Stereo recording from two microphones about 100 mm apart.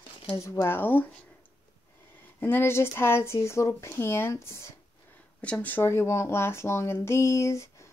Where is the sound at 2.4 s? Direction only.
25° left (ahead or behind).